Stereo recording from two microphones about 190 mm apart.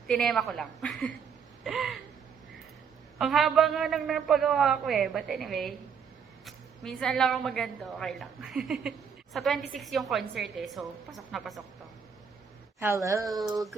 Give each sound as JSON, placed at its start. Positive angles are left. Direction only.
{"t": 0.1, "sound": "a man's voice", "side_deg": 0}
{"t": 3.2, "sound": "a man's voice", "side_deg": 0}
{"t": 12.8, "sound": "a woman's voice", "side_deg": -15}